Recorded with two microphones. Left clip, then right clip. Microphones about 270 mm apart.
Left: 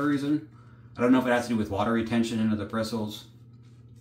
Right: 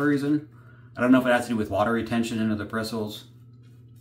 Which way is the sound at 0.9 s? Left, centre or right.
Centre.